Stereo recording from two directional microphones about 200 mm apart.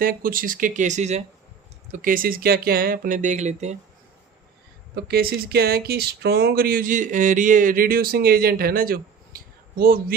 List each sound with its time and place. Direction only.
0.0 s speech: 45° right (ahead or behind)
4.9 s speech: 50° right (ahead or behind)